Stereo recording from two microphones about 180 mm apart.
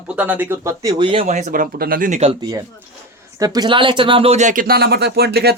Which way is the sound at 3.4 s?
20° right (ahead or behind).